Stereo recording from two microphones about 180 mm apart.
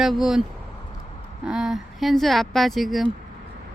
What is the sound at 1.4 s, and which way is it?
Speech, centre (ahead or behind).